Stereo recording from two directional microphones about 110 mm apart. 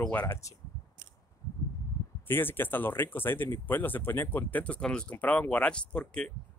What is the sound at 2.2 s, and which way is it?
Speech, 20° left (ahead or behind).